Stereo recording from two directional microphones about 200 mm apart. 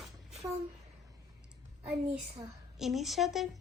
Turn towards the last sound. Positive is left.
turn(degrees=0)  # may be behind; listen again after turning